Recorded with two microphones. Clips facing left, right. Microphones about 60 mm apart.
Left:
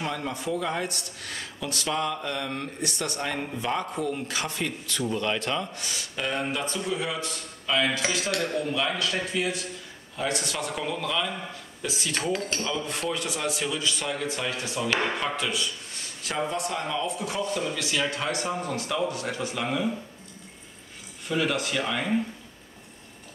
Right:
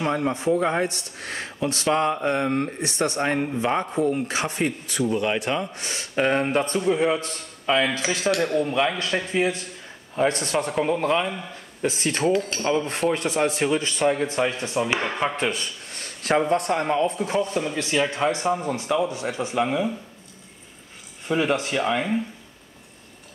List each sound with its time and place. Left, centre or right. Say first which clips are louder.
0.0 s speech: right 7 dB; right
5.8 s speech: right 8 dB; right
12.2 s speech: right 6 dB; centre
12.6 s a man's voice: right 7 dB; right
21.3 s speech: right 4 dB; right